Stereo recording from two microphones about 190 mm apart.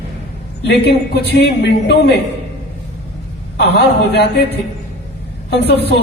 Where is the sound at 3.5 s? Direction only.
60° left (ahead or behind).